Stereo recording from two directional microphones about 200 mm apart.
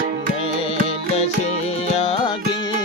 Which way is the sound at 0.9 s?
30° left (ahead or behind).